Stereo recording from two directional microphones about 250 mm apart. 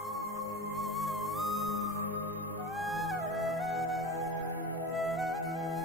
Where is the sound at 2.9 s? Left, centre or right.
Centre.